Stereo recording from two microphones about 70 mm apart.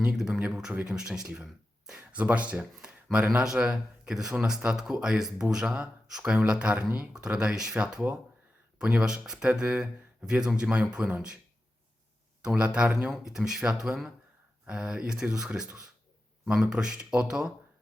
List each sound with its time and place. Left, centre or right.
0.0 s speech: centre
12.4 s speech: centre